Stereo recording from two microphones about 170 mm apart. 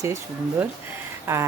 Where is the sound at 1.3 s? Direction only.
10° right (ahead or behind).